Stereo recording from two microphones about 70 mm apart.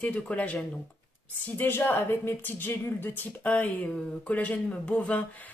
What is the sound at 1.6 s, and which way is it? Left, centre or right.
Speech, left.